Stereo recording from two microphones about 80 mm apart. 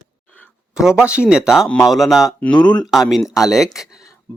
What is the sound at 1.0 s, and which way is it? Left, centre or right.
Speech, centre.